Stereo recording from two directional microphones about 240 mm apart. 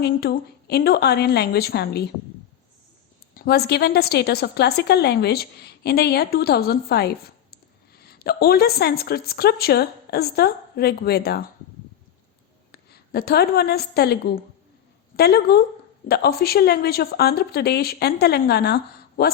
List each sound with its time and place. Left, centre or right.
0.0 s a woman's voice: left
3.3 s a woman's voice: left
12.7 s a woman's voice: left